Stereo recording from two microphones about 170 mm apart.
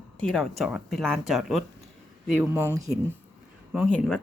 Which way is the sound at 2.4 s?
15° right (ahead or behind).